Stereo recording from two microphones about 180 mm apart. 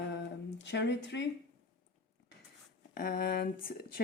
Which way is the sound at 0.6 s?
75° left (ahead or behind).